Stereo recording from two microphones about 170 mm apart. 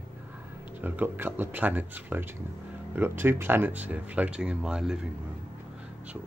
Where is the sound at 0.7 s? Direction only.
10° right (ahead or behind).